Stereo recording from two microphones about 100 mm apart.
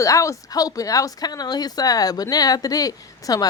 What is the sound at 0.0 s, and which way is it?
Speech, 35° left (ahead or behind).